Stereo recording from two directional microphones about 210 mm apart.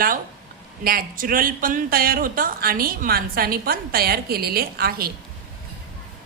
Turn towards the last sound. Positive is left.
turn(degrees=-45)  # may be behind; listen again after turning